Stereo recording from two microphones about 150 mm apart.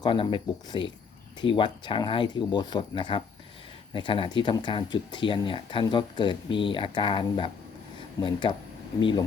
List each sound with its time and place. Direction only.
0.0 s speech: 35° left (ahead or behind)